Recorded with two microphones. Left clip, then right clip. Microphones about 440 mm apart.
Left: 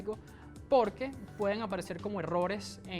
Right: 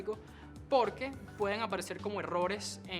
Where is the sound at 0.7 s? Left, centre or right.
Left.